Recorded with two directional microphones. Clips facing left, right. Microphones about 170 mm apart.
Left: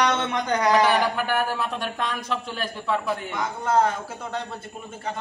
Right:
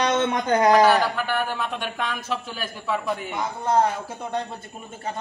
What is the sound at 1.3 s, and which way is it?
Speech, 40° left (ahead or behind).